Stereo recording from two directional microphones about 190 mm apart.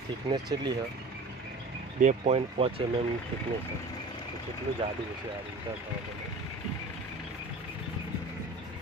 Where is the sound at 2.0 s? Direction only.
40° right (ahead or behind).